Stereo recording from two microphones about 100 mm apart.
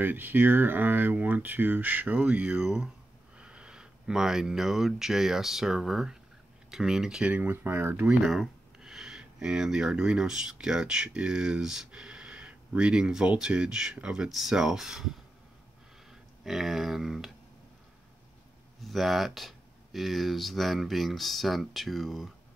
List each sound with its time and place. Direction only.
0.0 s speech: 20° right (ahead or behind)
8.2 s speech: 5° right (ahead or behind)
18.8 s speech: centre (ahead or behind)